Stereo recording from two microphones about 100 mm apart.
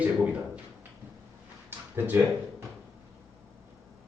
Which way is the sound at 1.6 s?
20° right (ahead or behind).